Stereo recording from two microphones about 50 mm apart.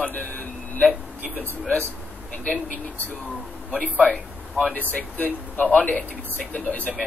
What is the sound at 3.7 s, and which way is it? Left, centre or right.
A man's voice, left.